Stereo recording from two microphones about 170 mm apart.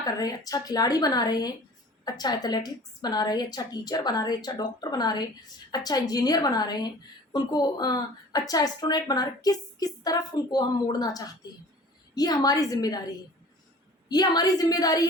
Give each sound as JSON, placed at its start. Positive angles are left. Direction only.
{"t": 0.0, "sound": "a woman's voice", "side_deg": 20}